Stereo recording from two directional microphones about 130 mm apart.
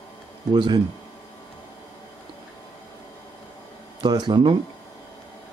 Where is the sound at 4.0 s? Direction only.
35° right (ahead or behind).